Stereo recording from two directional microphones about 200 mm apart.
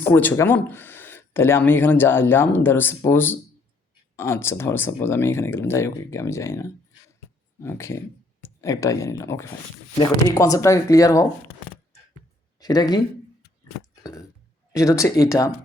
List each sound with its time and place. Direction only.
0.0 s speech: 10° left (ahead or behind)
12.5 s speech: 20° left (ahead or behind)
14.0 s a sound: 15° left (ahead or behind)
14.7 s speech: 15° left (ahead or behind)